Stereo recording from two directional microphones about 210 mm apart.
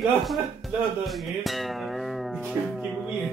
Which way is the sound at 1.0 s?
Centre (ahead or behind).